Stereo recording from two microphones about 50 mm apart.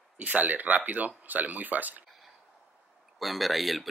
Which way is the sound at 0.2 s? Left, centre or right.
Right.